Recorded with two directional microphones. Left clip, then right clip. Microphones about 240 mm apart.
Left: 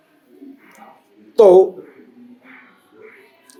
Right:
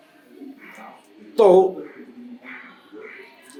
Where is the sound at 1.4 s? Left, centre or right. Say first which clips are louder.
Left 5 dB; left.